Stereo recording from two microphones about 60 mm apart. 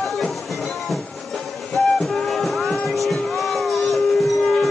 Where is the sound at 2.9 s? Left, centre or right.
Centre.